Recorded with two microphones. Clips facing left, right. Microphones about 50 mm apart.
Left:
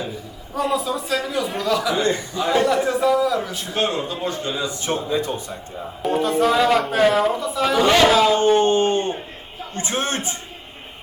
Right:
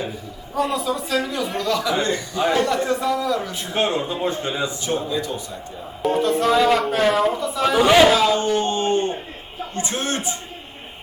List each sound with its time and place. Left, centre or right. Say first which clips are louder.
0.5 s speech: even; centre
3.8 s a man's voice: right 1 dB; right
5.0 s speech: left 2 dB; left
6.0 s speech: even; centre
8.4 s speech: left 5 dB; left